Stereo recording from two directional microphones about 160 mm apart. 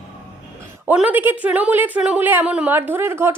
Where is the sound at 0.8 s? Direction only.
10° right (ahead or behind).